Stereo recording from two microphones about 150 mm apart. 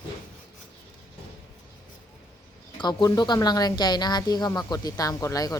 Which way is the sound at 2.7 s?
30° left (ahead or behind).